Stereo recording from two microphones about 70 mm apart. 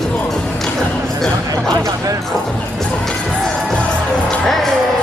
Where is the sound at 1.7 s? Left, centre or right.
Right.